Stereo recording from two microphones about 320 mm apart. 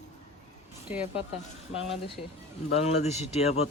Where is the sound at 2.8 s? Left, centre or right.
Centre.